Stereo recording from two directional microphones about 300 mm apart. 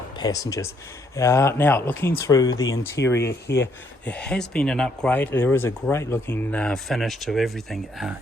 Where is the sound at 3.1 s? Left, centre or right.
Left.